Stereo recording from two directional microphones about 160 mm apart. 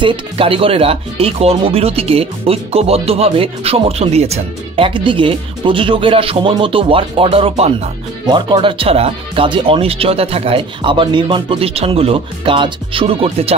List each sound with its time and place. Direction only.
0.0 s speech: 30° right (ahead or behind)
8.3 s speech: 30° right (ahead or behind)